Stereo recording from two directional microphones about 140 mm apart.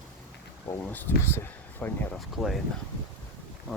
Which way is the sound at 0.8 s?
15° left (ahead or behind).